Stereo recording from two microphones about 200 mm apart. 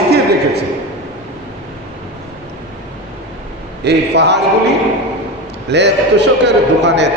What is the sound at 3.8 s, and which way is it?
Speech, 60° right (ahead or behind).